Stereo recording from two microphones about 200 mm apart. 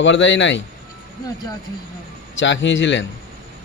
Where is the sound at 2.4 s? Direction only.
70° left (ahead or behind).